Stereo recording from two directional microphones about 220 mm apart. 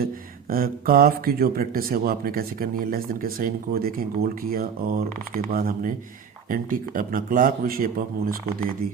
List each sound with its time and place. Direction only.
0.0 s speech: 40° right (ahead or behind)